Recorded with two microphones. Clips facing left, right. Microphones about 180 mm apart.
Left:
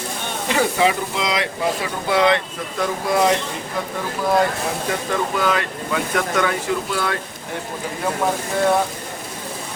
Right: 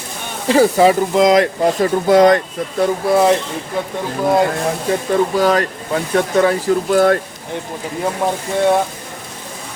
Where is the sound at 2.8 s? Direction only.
30° right (ahead or behind).